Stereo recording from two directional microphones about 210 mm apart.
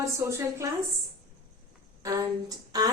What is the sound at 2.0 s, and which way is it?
Speech, 20° right (ahead or behind).